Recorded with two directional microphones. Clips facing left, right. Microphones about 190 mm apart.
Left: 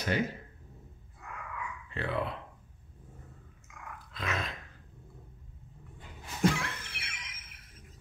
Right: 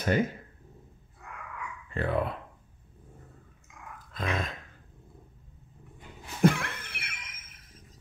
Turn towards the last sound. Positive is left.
turn(degrees=-55)  # may be behind; listen again after turning